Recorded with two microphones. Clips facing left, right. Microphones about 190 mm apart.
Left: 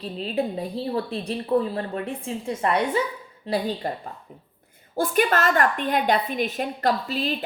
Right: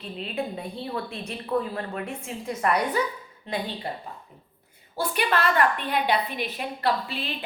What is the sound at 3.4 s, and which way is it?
Speech, 40° left (ahead or behind).